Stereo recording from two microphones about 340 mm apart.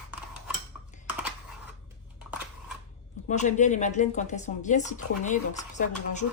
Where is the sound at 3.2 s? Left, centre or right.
Left.